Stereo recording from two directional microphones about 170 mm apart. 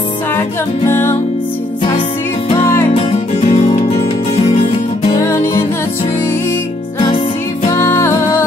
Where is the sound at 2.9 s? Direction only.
40° left (ahead or behind).